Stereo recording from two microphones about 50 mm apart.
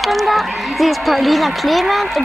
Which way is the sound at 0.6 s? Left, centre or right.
Centre.